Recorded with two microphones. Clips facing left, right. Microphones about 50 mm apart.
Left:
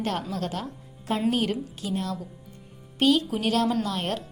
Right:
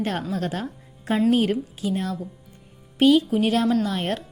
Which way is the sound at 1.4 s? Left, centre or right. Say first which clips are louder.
Right 5 dB; centre.